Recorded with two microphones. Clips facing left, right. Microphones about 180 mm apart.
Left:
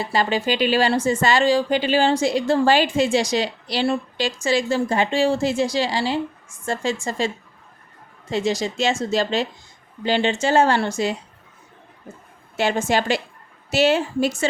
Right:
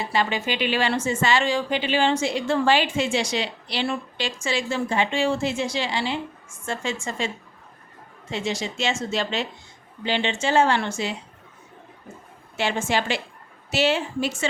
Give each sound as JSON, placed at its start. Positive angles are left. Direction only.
{"t": 0.1, "sound": "speech", "side_deg": 35}
{"t": 8.3, "sound": "speech", "side_deg": 40}
{"t": 12.5, "sound": "speech", "side_deg": 40}